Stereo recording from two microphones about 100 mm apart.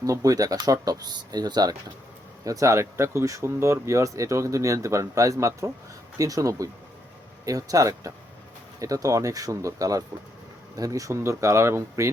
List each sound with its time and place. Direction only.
0.0 s speech: 35° right (ahead or behind)